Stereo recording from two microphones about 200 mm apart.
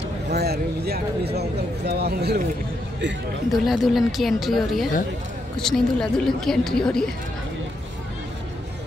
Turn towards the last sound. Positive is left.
turn(degrees=5)  # may be behind; listen again after turning